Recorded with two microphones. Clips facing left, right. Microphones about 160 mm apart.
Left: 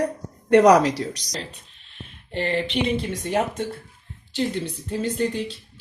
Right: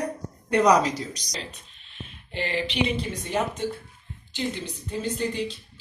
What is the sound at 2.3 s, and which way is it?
A woman's voice, 55° left (ahead or behind).